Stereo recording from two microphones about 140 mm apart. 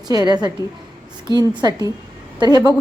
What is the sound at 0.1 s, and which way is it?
A woman's voice, 30° right (ahead or behind).